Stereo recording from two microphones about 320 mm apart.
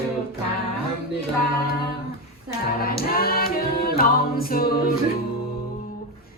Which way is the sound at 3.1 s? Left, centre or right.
Left.